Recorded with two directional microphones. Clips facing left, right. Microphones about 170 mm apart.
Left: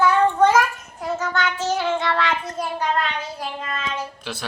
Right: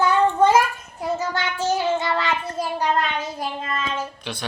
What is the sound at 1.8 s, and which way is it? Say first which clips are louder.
Child singing: even; 5° right (ahead or behind).